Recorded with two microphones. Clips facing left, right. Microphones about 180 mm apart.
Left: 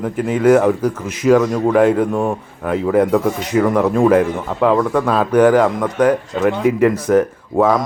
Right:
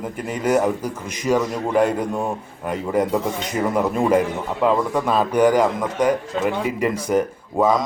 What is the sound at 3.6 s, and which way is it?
Speech, 75° left (ahead or behind).